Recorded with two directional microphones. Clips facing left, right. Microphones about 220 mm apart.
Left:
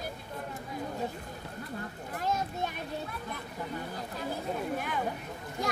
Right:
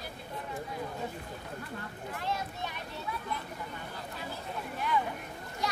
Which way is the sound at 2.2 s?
45° left (ahead or behind).